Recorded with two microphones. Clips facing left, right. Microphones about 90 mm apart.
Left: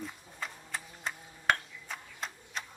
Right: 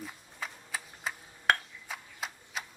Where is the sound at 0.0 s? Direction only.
5° right (ahead or behind).